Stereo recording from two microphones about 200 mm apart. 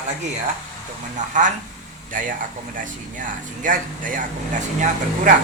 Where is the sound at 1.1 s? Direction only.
40° right (ahead or behind).